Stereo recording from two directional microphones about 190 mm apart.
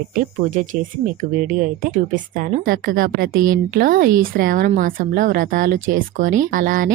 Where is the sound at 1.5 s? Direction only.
45° right (ahead or behind).